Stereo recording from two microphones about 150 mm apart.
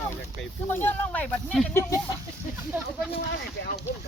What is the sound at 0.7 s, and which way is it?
Speech, 15° left (ahead or behind).